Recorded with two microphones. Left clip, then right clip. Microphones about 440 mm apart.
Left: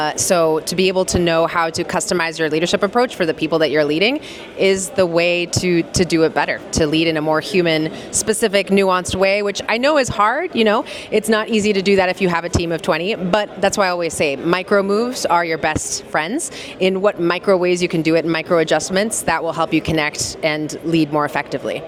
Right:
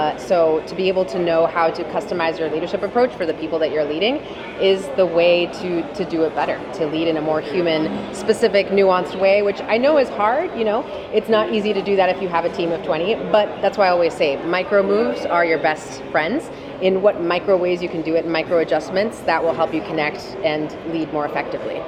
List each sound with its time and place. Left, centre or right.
0.0 s speech: left